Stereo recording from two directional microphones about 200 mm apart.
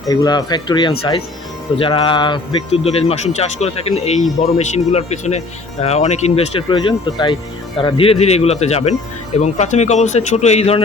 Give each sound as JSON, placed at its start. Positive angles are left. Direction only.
{"t": 0.1, "sound": "speech", "side_deg": 20}